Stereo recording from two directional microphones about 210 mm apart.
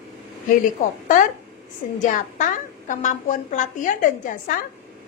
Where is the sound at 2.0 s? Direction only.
35° left (ahead or behind).